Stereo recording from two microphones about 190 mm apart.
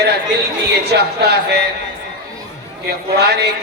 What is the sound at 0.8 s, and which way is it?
Speech, 60° right (ahead or behind).